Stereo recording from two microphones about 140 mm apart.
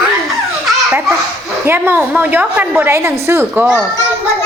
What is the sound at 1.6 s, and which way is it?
A woman's voice, 15° right (ahead or behind).